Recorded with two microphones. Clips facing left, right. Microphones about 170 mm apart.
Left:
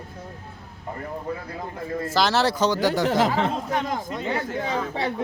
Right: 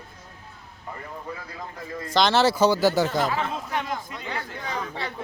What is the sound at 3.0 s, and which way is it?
Speech, 70° left (ahead or behind).